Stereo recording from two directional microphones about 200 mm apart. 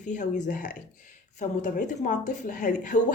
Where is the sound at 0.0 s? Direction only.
40° left (ahead or behind).